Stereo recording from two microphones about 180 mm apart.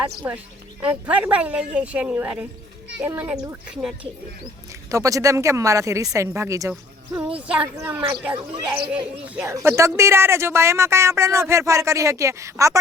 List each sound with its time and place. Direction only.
0.3 s a woman's voice: 10° right (ahead or behind)
4.9 s a woman's voice: 20° right (ahead or behind)
7.3 s a woman's voice: 5° right (ahead or behind)